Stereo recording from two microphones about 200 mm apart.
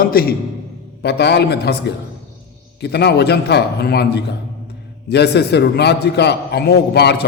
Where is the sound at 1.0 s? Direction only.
55° left (ahead or behind).